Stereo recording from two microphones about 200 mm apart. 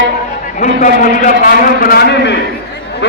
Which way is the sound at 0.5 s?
40° left (ahead or behind).